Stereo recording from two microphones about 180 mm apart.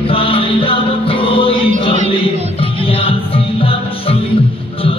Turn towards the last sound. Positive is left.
turn(degrees=30)  # may be behind; listen again after turning